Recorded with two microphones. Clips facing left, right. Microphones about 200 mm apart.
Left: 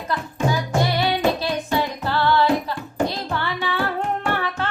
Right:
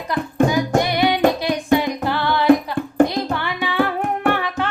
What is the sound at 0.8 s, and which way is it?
Music, 15° right (ahead or behind).